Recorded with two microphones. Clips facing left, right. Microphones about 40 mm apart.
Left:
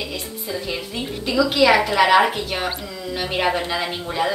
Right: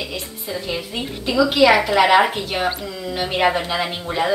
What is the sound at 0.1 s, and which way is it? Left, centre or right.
A woman's voice, centre.